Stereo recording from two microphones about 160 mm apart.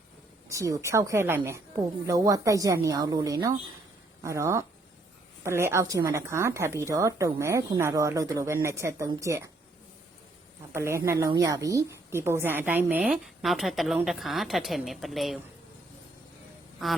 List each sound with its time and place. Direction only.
0.4 s a woman's voice: 20° right (ahead or behind)
10.7 s a woman's voice: 15° right (ahead or behind); by 15.4 s centre (ahead or behind)
16.8 s a woman's voice: centre (ahead or behind)